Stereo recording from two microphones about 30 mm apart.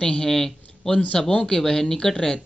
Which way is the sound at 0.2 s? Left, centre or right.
Centre.